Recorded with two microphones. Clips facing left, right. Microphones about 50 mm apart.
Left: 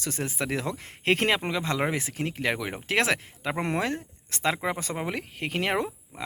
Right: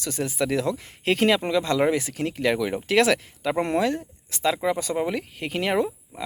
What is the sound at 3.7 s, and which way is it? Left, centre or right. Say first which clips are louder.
Speech: right 5 dB; left.